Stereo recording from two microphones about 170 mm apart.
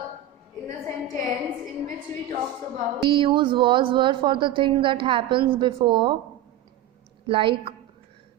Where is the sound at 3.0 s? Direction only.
30° right (ahead or behind).